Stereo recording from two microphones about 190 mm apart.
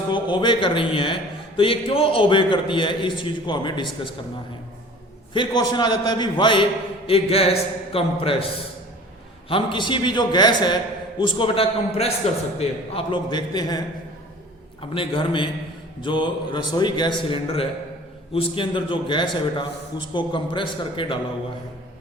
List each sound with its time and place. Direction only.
0.1 s a man's voice: 25° left (ahead or behind)
5.3 s a man's voice: 25° left (ahead or behind)
9.5 s a man's voice: 25° left (ahead or behind)